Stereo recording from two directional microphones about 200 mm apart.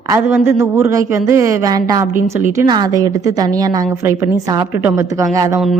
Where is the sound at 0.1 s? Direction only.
10° right (ahead or behind).